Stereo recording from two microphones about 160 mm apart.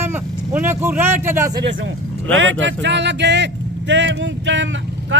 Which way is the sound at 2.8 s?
90° right.